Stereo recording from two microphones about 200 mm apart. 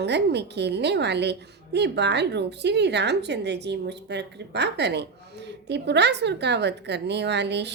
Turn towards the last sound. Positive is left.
turn(degrees=-60)  # may be behind; listen again after turning